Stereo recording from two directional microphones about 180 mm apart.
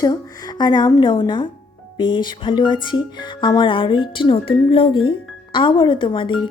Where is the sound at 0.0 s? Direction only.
20° left (ahead or behind).